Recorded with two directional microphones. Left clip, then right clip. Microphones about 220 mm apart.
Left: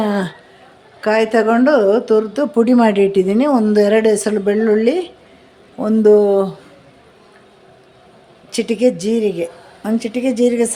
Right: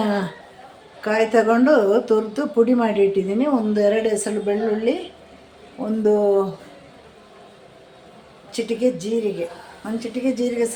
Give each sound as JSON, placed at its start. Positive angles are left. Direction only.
{"t": 0.0, "sound": "a woman's voice", "side_deg": 30}
{"t": 5.8, "sound": "a man's voice", "side_deg": 40}
{"t": 8.5, "sound": "a woman's voice", "side_deg": 55}